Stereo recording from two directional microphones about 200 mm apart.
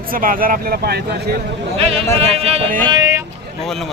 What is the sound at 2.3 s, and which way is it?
Speech, 30° right (ahead or behind).